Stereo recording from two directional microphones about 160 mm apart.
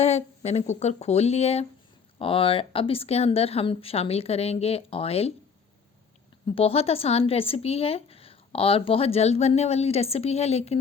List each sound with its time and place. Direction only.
0.0 s a woman's voice: 45° left (ahead or behind)
6.5 s speech: 35° left (ahead or behind)